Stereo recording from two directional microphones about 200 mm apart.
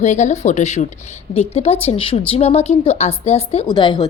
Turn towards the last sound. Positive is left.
turn(degrees=20)  # may be behind; listen again after turning